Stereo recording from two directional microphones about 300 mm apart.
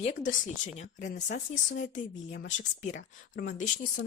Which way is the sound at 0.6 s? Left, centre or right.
Left.